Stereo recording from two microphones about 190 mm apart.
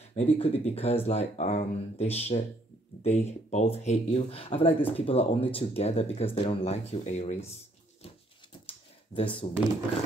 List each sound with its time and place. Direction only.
0.1 s speech: 35° left (ahead or behind)
8.6 s computer keyboard: 30° left (ahead or behind)